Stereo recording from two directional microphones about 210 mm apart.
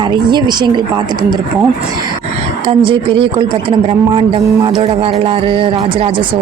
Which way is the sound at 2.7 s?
25° right (ahead or behind).